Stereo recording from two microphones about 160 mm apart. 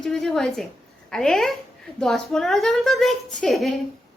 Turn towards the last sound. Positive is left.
turn(degrees=0)  # may be behind; listen again after turning